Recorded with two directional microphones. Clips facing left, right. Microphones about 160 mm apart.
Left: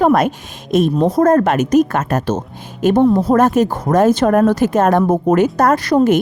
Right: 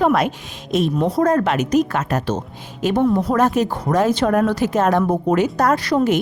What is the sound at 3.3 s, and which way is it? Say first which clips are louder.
A woman's voice: left 5 dB; 50° left (ahead or behind).